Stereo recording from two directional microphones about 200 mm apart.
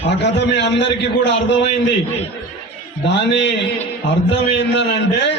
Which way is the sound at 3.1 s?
60° left (ahead or behind).